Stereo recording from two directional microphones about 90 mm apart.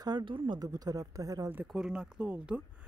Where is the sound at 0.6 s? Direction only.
45° right (ahead or behind).